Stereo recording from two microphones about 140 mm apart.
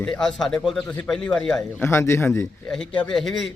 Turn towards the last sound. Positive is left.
turn(degrees=5)  # may be behind; listen again after turning